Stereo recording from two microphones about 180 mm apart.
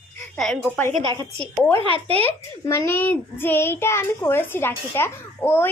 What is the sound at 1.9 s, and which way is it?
Speech, 35° right (ahead or behind).